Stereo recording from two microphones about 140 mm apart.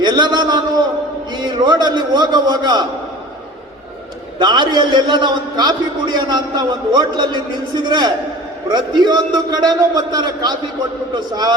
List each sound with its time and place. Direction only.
0.0 s a man's voice: 30° right (ahead or behind)
4.4 s a man's voice: 35° right (ahead or behind)